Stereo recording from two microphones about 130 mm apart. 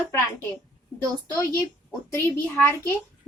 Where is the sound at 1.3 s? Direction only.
15° left (ahead or behind).